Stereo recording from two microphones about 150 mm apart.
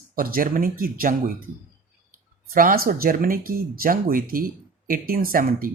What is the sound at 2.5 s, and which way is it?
Speech, 70° right (ahead or behind).